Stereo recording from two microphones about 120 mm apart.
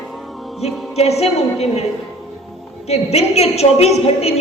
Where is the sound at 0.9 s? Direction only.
60° left (ahead or behind).